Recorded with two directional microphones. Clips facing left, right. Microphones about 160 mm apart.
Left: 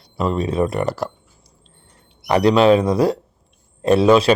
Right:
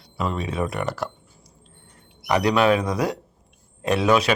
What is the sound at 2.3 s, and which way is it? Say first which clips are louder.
Speech: left 6 dB; 30° left (ahead or behind).